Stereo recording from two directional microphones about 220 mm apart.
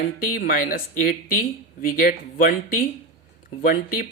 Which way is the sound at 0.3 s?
40° left (ahead or behind).